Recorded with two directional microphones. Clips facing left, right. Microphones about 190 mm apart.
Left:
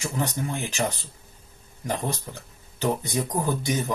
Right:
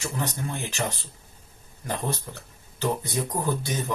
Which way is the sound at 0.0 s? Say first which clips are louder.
Left 2 dB; 15° left (ahead or behind).